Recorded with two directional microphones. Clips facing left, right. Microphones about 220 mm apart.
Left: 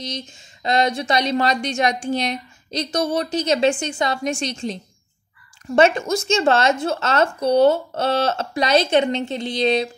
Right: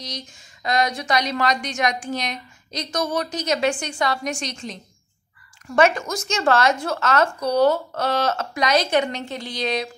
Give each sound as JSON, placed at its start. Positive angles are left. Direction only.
{"t": 0.0, "sound": "speech", "side_deg": 25}